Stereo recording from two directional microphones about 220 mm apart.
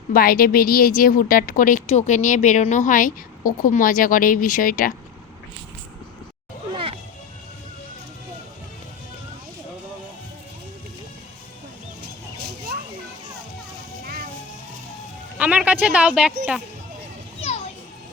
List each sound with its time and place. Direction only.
0.1 s a woman's voice: 40° left (ahead or behind)
6.7 s music: 25° right (ahead or behind)
15.4 s speech: 5° right (ahead or behind)